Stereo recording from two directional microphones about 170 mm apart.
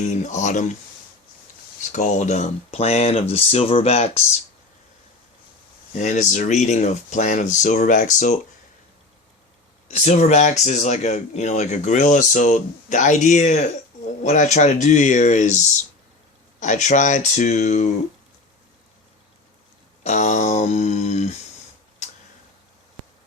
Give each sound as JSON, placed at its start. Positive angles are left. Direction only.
{"t": 0.0, "sound": "speech", "side_deg": 45}
{"t": 1.8, "sound": "speech", "side_deg": 45}
{"t": 5.9, "sound": "speech", "side_deg": 45}
{"t": 10.0, "sound": "speech", "side_deg": 45}
{"t": 20.1, "sound": "a sound", "side_deg": 45}